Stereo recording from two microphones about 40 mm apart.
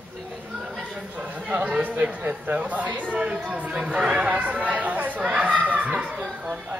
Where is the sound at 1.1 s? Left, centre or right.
Right.